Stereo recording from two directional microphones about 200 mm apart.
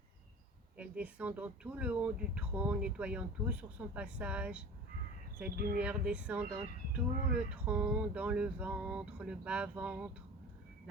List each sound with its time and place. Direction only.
0.8 s speech: 5° right (ahead or behind)
5.5 s speech: 50° right (ahead or behind)
5.8 s speech: 5° right (ahead or behind)